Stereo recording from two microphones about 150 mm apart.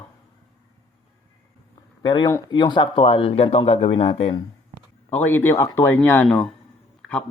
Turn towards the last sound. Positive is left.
turn(degrees=10)  # may be behind; listen again after turning